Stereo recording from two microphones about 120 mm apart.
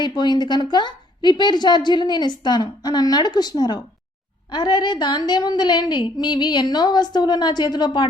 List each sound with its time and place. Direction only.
0.0 s a woman's voice: 35° left (ahead or behind)